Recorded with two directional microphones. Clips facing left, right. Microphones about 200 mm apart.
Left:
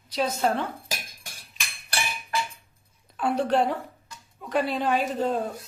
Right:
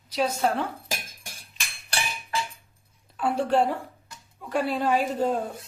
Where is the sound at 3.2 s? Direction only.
5° right (ahead or behind).